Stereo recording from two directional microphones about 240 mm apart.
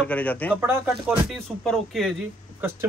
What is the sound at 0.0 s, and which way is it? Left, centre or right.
Speech, centre.